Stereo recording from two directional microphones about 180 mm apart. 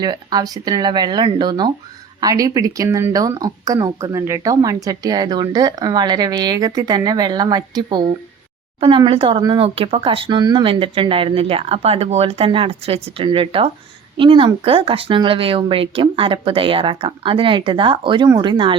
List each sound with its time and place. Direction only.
0.0 s speech: 25° right (ahead or behind)